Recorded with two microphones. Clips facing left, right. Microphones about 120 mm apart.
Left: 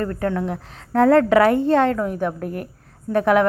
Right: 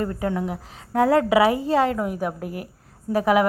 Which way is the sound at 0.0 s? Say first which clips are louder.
Left 2 dB; 15° right (ahead or behind).